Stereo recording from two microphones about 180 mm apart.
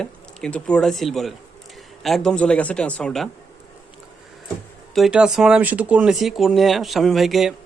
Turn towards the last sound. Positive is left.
turn(degrees=0)  # may be behind; listen again after turning